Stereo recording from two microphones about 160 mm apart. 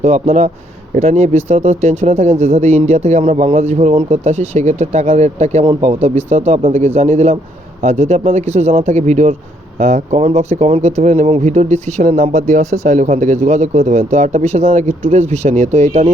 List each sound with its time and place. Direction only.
0.0 s a man's voice: 40° right (ahead or behind)